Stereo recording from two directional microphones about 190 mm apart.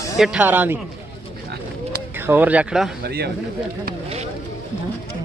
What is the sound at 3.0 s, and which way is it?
Speech, 55° right (ahead or behind).